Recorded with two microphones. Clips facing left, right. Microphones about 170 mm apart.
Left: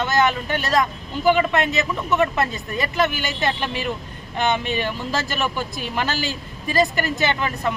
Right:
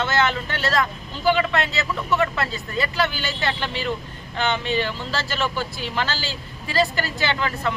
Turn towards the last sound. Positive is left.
turn(degrees=20)  # may be behind; listen again after turning